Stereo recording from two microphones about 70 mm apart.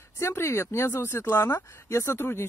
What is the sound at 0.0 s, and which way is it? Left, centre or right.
Speech, left.